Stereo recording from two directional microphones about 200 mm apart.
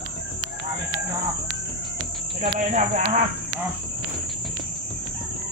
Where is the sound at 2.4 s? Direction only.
35° right (ahead or behind).